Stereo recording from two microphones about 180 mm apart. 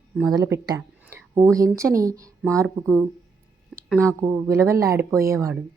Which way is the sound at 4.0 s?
15° right (ahead or behind).